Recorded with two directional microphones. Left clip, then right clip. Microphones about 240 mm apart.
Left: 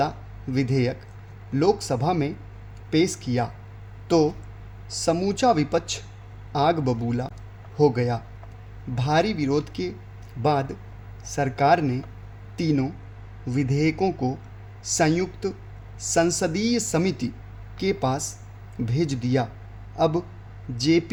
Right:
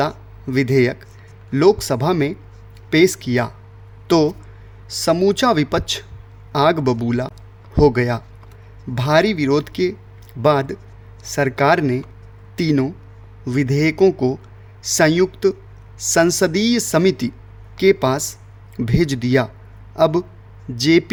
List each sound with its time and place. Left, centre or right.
0.5 s speech: right